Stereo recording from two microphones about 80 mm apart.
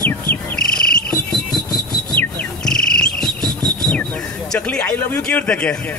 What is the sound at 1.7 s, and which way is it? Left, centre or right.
Rub, left.